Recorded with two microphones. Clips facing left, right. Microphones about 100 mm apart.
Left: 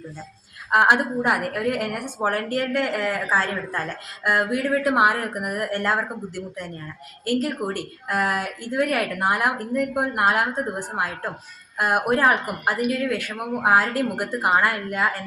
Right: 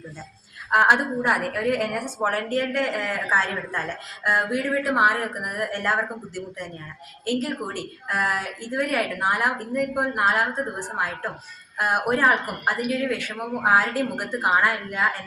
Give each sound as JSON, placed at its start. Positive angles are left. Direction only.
{"t": 0.7, "sound": "a woman's voice", "side_deg": 5}